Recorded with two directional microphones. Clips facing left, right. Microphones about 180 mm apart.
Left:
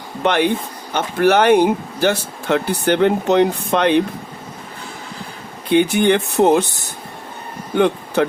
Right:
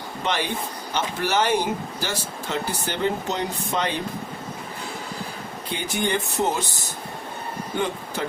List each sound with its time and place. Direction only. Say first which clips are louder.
0.2 s speech: left 10 dB; 60° left (ahead or behind)
5.7 s speech: left 12 dB; 65° left (ahead or behind)